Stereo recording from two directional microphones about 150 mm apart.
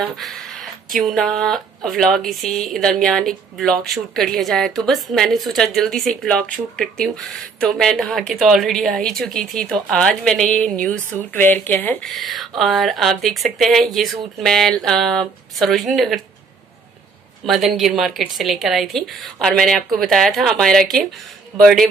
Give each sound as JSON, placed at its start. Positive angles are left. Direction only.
{"t": 0.0, "sound": "speech", "side_deg": 0}
{"t": 12.0, "sound": "speech", "side_deg": 0}
{"t": 17.4, "sound": "speech", "side_deg": 0}